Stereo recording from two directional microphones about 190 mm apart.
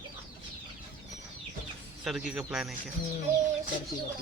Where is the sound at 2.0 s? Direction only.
Centre (ahead or behind).